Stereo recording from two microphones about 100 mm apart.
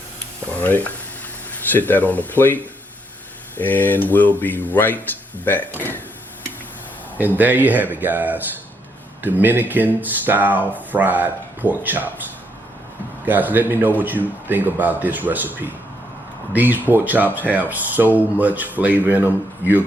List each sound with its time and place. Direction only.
0.6 s speech: 15° left (ahead or behind)
3.6 s speech: 20° left (ahead or behind)
7.2 s speech: 15° right (ahead or behind)
13.2 s speech: 20° right (ahead or behind)